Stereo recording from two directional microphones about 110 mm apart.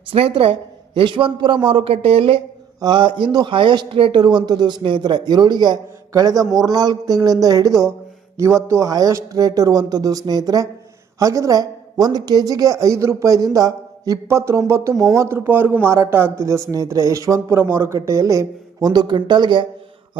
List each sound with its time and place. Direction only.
0.1 s speech: 55° right (ahead or behind)
2.8 s speech: 45° right (ahead or behind)
6.4 s a man's voice: centre (ahead or behind)
6.7 s a woman's voice: 35° right (ahead or behind)